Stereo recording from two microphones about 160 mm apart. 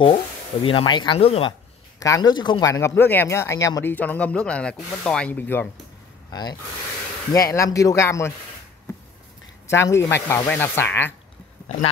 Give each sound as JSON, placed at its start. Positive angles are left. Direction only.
{"t": 0.0, "sound": "speech", "side_deg": 30}
{"t": 2.0, "sound": "speech", "side_deg": 20}
{"t": 7.3, "sound": "speech", "side_deg": 20}
{"t": 9.7, "sound": "speech", "side_deg": 15}